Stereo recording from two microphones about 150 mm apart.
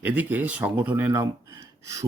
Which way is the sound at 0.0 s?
10° right (ahead or behind).